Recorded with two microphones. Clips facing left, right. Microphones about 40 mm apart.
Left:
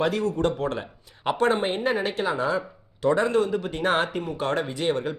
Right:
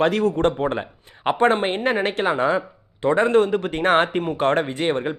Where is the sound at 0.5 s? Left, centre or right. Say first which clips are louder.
Right 4 dB; right.